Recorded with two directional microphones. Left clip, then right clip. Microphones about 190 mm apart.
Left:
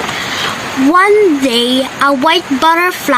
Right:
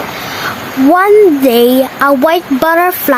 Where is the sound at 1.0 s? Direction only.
55° right (ahead or behind).